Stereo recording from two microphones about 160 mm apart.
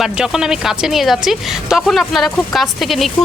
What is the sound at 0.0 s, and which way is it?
Speech, 5° right (ahead or behind).